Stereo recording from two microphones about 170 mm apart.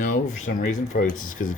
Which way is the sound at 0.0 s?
50° left (ahead or behind).